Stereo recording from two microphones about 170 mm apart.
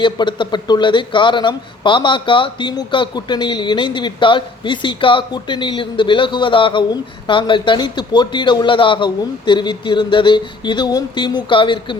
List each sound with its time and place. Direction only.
0.0 s speech: 30° left (ahead or behind)